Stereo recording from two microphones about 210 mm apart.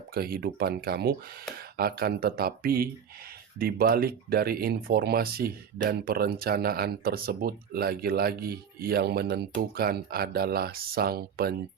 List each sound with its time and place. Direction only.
0.1 s speech: 45° right (ahead or behind)